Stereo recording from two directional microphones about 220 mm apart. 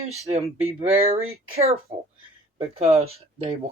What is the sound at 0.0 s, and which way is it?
Speech, 25° right (ahead or behind).